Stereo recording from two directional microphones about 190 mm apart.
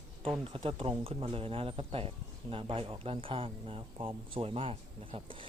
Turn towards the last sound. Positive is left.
turn(degrees=-25)  # may be behind; listen again after turning